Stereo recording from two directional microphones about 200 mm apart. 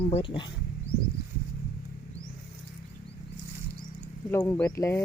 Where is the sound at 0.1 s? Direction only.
25° left (ahead or behind).